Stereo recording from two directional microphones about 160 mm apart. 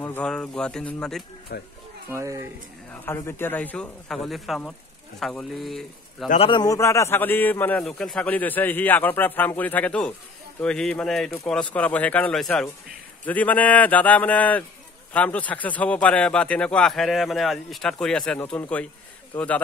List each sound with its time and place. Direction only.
0.0 s speech: 10° left (ahead or behind)
1.5 s speech: 75° left (ahead or behind)
2.0 s speech: 20° right (ahead or behind)
2.9 s a man's voice: 15° left (ahead or behind)
6.4 s a man's voice: 25° left (ahead or behind); by 19.6 s 10° left (ahead or behind)